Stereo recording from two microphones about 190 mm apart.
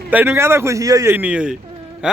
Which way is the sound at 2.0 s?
5° right (ahead or behind).